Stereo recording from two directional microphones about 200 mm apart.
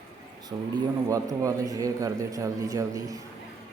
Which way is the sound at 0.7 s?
15° right (ahead or behind).